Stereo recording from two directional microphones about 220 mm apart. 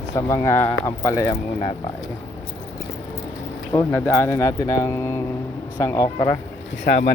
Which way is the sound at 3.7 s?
10° left (ahead or behind).